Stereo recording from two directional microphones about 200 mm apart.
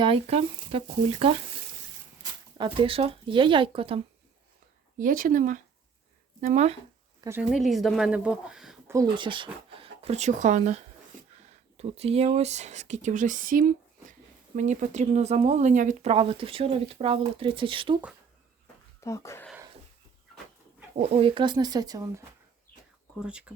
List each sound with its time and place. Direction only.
0.0 s speech: 30° right (ahead or behind)
2.6 s speech: 25° right (ahead or behind)
4.9 s speech: 45° right (ahead or behind)
7.3 s speech: 5° right (ahead or behind)
8.9 s speech: 20° right (ahead or behind)
19.0 s speech: 15° left (ahead or behind)
21.0 s speech: 30° right (ahead or behind)
23.2 s speech: 5° right (ahead or behind)